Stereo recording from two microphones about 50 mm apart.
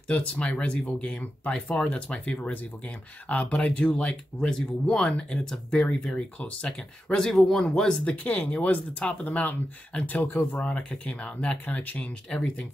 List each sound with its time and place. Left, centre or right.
0.1 s speech: left
7.2 s speech: centre
8.2 s speech: left
10.6 s speech: left
11.7 s speech: left
12.3 s speech: left